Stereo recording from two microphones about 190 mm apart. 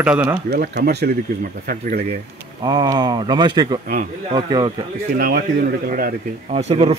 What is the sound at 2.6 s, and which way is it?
Speech, 20° right (ahead or behind).